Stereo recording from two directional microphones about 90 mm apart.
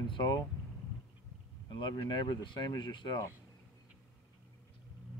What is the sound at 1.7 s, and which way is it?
Speech, 65° left (ahead or behind).